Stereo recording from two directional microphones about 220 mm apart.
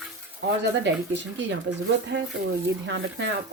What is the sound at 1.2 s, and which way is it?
Speech, 55° right (ahead or behind).